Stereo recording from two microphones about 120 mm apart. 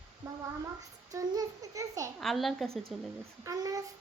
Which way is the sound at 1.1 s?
30° right (ahead or behind).